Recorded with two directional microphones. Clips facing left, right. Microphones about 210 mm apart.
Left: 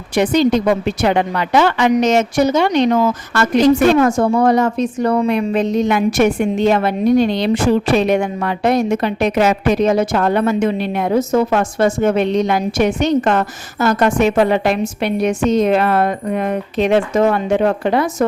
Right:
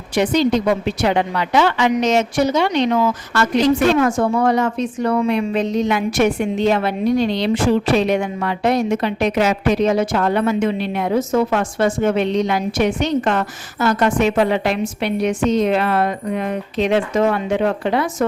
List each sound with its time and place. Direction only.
0.2 s a woman's voice: 50° left (ahead or behind)